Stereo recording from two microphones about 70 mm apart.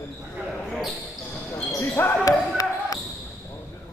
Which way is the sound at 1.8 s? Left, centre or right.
Left.